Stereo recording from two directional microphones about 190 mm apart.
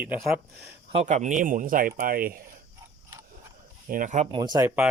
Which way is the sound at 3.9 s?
40° right (ahead or behind).